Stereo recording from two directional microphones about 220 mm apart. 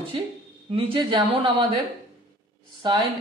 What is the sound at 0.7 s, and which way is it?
Speech, 20° right (ahead or behind).